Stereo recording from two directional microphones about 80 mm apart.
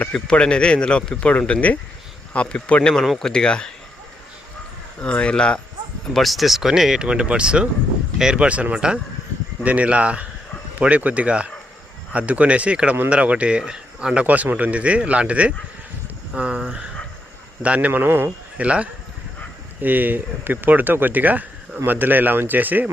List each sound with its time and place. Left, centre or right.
0.0 s speech: centre
4.9 s speech: centre
6.1 s speech: centre
17.7 s speech: right
18.5 s speech: centre